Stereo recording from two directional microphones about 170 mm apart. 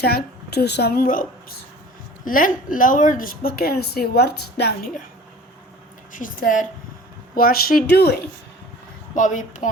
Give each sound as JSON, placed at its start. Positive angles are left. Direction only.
{"t": 0.0, "sound": "a woman's voice", "side_deg": 70}
{"t": 6.1, "sound": "a woman's voice", "side_deg": 50}
{"t": 9.1, "sound": "a woman's voice", "side_deg": 50}